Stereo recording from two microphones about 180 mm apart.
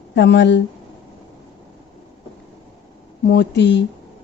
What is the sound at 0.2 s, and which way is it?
Speech, 80° left.